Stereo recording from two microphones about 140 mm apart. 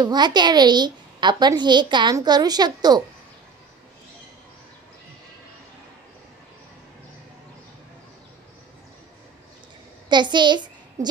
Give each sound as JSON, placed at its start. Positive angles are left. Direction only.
{"t": 0.0, "sound": "a woman's voice", "side_deg": -30}
{"t": 10.0, "sound": "a child's voice", "side_deg": -35}